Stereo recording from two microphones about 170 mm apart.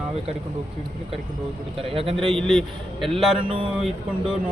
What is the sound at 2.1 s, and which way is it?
A man's voice, centre (ahead or behind).